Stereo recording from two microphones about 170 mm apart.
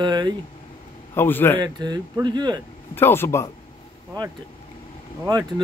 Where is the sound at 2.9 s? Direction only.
15° left (ahead or behind).